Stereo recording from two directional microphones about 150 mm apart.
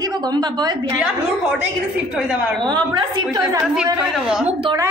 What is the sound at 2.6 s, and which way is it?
Speech, 30° right (ahead or behind).